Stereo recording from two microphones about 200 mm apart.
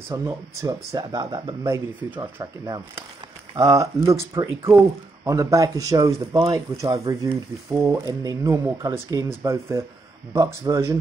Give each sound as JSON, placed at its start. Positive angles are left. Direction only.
{"t": 0.1, "sound": "speech", "side_deg": -15}
{"t": 2.0, "sound": "speech", "side_deg": -10}